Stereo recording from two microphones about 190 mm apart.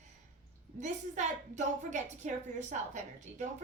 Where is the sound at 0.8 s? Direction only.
40° right (ahead or behind).